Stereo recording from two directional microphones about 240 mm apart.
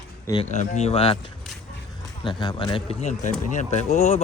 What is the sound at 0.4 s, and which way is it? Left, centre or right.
Speech, left.